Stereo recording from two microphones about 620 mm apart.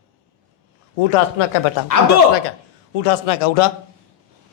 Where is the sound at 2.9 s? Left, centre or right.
Left.